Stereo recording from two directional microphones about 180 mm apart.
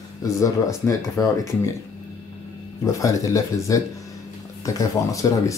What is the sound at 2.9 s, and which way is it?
Speech, 15° left (ahead or behind).